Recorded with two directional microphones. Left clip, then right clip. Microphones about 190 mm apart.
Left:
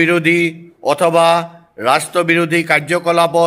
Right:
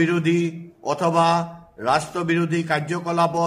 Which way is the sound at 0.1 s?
30° left (ahead or behind).